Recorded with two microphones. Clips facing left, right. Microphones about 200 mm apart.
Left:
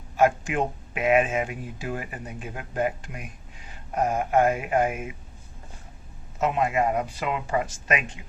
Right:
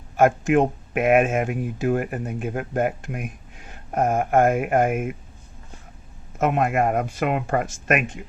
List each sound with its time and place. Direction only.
0.2 s speech: 50° right (ahead or behind)
6.4 s speech: 55° right (ahead or behind)